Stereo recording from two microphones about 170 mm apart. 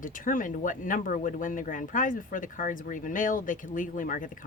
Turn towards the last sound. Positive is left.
turn(degrees=50)  # may be behind; listen again after turning